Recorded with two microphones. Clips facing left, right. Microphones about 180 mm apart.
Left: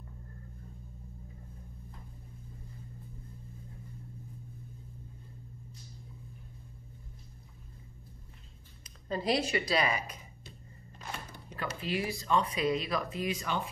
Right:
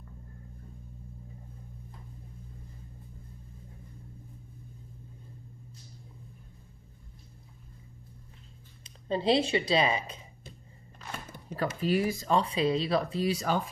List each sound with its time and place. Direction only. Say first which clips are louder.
8.8 s speech: right 5 dB; 25° right (ahead or behind)
11.5 s speech: right 7 dB; 40° right (ahead or behind)